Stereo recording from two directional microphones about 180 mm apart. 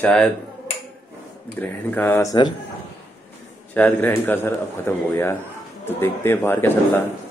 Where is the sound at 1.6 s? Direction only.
10° left (ahead or behind).